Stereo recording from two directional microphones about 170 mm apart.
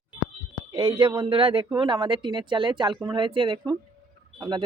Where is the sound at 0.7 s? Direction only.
30° right (ahead or behind).